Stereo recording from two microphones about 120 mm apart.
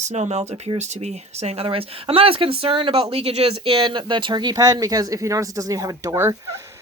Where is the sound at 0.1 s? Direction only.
70° right (ahead or behind).